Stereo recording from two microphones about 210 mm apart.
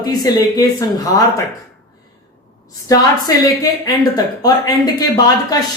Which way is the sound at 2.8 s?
15° left (ahead or behind).